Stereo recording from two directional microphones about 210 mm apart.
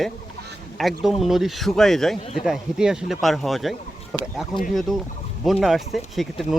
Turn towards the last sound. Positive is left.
turn(degrees=0)  # may be behind; listen again after turning